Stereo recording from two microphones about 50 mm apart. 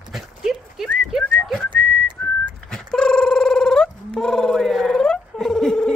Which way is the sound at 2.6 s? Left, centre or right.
Centre.